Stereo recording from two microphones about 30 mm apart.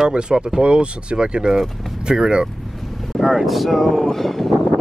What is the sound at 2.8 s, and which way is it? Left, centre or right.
Vehicle, centre.